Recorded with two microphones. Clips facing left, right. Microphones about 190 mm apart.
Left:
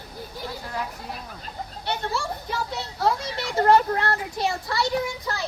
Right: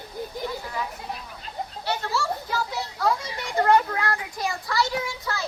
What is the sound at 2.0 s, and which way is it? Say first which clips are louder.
Children playing: right 1 dB; 20° left (ahead or behind).